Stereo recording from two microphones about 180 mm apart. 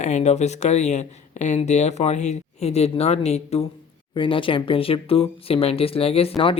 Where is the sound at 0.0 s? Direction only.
40° left (ahead or behind).